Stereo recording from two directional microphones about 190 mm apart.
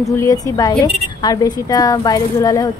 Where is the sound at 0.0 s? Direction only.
15° left (ahead or behind).